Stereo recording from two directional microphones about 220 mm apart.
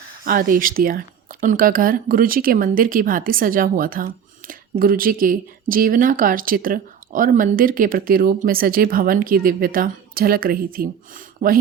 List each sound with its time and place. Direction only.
0.3 s speech: 40° right (ahead or behind)